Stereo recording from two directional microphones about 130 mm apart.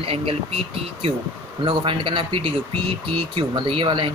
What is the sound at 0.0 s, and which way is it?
Speech, 45° right (ahead or behind).